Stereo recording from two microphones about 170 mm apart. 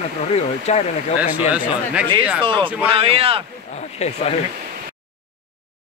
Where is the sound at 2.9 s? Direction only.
35° right (ahead or behind).